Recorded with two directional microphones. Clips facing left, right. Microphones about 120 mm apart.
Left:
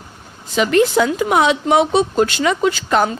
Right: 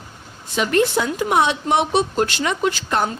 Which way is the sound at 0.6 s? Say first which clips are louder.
Left 4 dB; 90° left.